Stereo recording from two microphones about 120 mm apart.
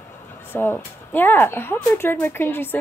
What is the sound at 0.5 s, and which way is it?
A woman's voice, 15° left (ahead or behind).